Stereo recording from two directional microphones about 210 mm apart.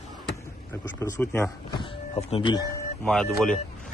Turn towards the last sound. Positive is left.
turn(degrees=0)  # may be behind; listen again after turning